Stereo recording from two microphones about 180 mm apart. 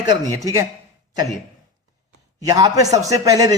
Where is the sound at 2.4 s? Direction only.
20° right (ahead or behind).